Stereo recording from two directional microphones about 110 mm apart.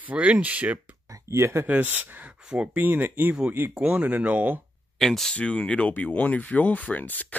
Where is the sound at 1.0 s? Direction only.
25° right (ahead or behind).